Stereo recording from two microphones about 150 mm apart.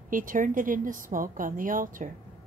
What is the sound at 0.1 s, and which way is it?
A woman's voice, 60° right (ahead or behind).